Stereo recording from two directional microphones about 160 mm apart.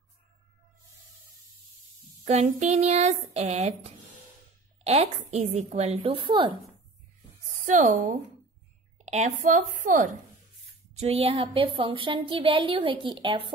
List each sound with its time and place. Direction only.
2.2 s a woman's voice: 45° right (ahead or behind)
7.6 s a woman's voice: 55° right (ahead or behind)
11.0 s a woman's voice: 40° right (ahead or behind)